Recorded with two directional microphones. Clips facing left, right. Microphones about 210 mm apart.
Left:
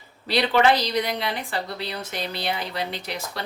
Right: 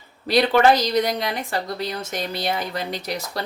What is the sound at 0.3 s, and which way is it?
A woman's voice, 45° right (ahead or behind).